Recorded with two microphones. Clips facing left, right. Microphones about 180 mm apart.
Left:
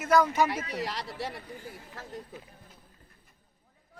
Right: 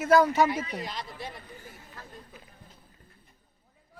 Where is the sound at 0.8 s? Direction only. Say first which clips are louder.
Left 3 dB; 80° left.